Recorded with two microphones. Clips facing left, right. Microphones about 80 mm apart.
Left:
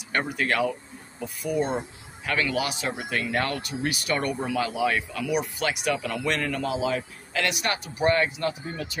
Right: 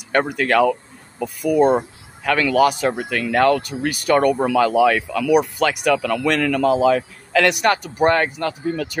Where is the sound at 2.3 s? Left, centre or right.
Right.